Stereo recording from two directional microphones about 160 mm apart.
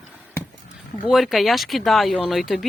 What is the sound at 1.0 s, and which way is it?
Speech, centre (ahead or behind).